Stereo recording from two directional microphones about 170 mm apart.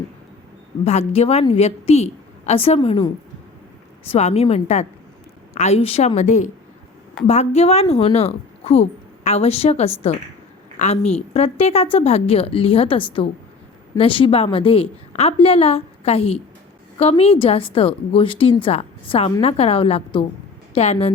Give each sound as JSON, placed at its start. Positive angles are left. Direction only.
{"t": 0.9, "sound": "a woman's voice", "side_deg": 40}
{"t": 4.1, "sound": "a woman's voice", "side_deg": 40}